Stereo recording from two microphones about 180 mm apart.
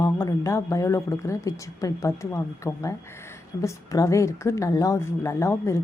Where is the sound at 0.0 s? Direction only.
20° left (ahead or behind).